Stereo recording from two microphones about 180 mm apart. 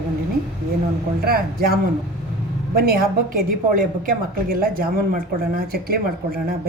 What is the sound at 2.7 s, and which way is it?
A woman's voice, 55° right (ahead or behind).